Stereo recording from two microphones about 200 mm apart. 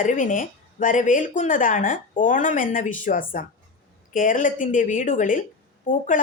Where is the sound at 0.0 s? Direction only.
40° left (ahead or behind).